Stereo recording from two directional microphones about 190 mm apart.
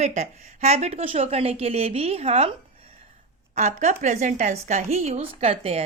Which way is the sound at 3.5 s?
35° right (ahead or behind).